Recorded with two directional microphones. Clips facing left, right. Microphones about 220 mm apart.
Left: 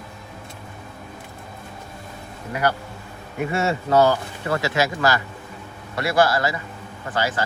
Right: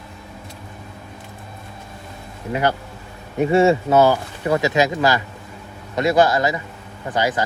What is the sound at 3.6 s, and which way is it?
Speech, 15° right (ahead or behind).